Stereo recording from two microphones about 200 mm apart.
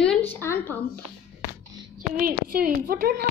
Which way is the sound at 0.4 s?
10° left (ahead or behind).